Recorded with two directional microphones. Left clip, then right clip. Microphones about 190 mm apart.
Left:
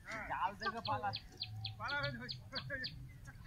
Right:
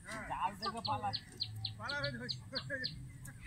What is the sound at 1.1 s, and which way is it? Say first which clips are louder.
Bird: right 4 dB; 5° left (ahead or behind).